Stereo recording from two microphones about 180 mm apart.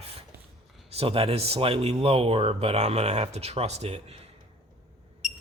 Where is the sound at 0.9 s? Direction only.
30° right (ahead or behind).